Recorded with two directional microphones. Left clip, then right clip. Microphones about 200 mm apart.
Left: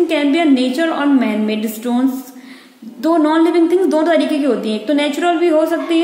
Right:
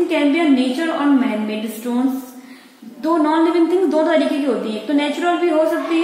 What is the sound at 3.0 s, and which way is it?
A woman's voice, 35° left (ahead or behind).